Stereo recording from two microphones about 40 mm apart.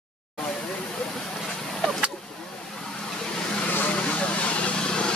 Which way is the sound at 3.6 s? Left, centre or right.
Left.